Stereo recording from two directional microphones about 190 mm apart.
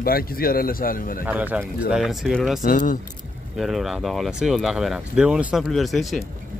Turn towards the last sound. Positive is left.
turn(degrees=0)  # may be behind; listen again after turning